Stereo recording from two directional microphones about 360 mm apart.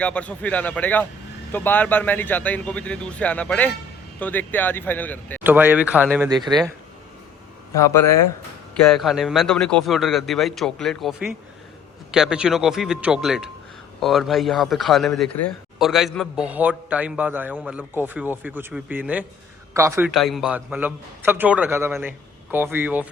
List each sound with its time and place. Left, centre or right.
0.0 s a man's voice: centre
7.8 s a man's voice: centre